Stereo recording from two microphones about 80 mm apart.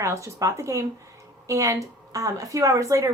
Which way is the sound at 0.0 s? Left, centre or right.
Right.